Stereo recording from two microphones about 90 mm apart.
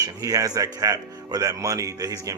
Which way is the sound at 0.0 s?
40° right (ahead or behind).